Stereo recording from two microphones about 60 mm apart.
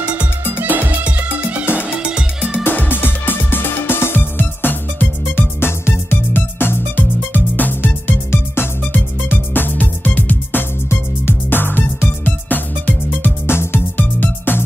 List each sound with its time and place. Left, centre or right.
0.5 s music: right
2.0 s music: centre
2.5 s music: left